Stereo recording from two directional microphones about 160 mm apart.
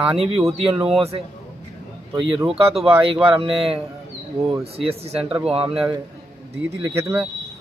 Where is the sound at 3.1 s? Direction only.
35° right (ahead or behind).